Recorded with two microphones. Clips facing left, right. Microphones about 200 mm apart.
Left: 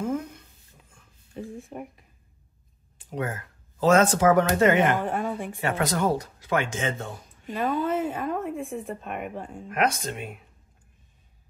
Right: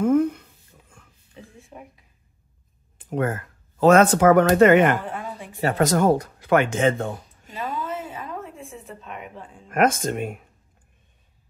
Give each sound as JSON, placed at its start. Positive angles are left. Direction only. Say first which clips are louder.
{"t": 0.0, "sound": "a sound", "louder": "right 10 dB", "side_deg": -60}
{"t": 1.3, "sound": "a sound", "louder": "left 7 dB", "side_deg": 50}
{"t": 3.0, "sound": "speech", "louder": "right 6 dB", "side_deg": -50}
{"t": 5.1, "sound": "a woman's voice", "louder": "left 5 dB", "side_deg": 45}
{"t": 5.6, "sound": "speech", "louder": "right 7 dB", "side_deg": -40}
{"t": 7.4, "sound": "speech", "louder": "left 5 dB", "side_deg": 45}
{"t": 9.7, "sound": "speech", "louder": "right 6 dB", "side_deg": -50}